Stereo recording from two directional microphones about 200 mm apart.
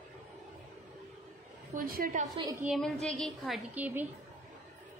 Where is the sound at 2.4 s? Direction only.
15° right (ahead or behind).